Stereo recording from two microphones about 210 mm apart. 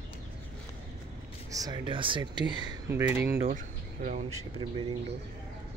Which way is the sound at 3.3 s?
40° right (ahead or behind).